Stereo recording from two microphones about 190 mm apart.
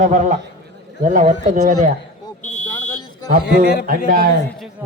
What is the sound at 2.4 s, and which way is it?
Fire alarm, 40° left (ahead or behind).